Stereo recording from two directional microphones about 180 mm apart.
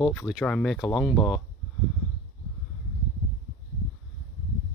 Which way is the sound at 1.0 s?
15° left (ahead or behind).